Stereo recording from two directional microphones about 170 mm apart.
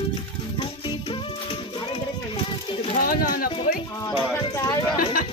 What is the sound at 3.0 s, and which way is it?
Speech, 55° left (ahead or behind).